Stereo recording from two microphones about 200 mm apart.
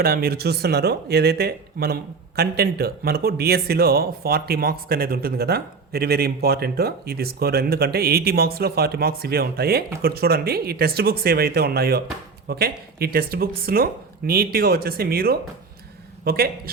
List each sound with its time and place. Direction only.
0.0 s speech: 50° right (ahead or behind)